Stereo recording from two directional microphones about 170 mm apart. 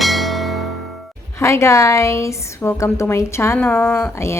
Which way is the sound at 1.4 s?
15° left (ahead or behind).